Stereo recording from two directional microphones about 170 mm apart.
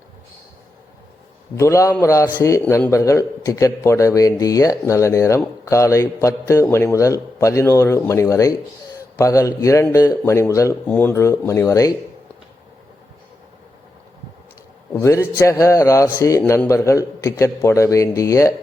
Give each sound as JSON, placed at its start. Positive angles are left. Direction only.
{"t": 1.5, "sound": "a man's voice", "side_deg": 15}
{"t": 14.9, "sound": "a man's voice", "side_deg": 15}